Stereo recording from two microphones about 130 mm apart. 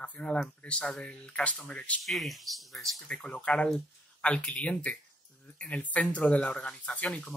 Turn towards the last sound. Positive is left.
turn(degrees=10)  # may be behind; listen again after turning